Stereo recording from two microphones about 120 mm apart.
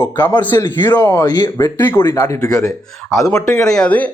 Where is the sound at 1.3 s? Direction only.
35° left (ahead or behind).